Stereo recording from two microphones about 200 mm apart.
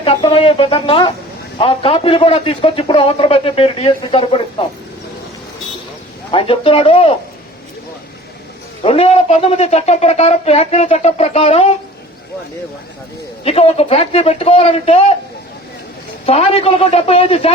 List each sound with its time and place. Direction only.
0.0 s a man's voice: 30° left (ahead or behind)
6.3 s a man's voice: 25° left (ahead or behind)
8.8 s speech: 30° left (ahead or behind)
13.4 s a man's voice: 30° left (ahead or behind)
16.2 s speech: 30° left (ahead or behind)